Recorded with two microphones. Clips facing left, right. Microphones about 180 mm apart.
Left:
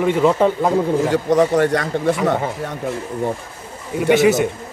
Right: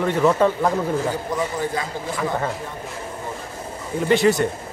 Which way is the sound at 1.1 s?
80° left.